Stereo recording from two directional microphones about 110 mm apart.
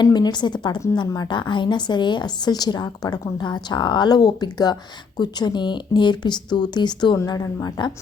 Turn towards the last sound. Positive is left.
turn(degrees=35)  # may be behind; listen again after turning